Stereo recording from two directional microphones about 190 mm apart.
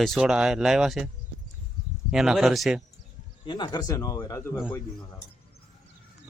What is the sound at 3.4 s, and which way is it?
Speech, 25° left (ahead or behind).